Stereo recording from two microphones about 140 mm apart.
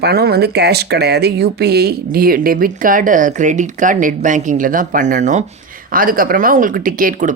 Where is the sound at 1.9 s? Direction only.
90° right; by 5.5 s 60° right (ahead or behind).